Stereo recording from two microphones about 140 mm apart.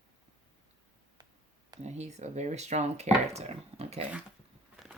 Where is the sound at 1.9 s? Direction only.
50° right (ahead or behind).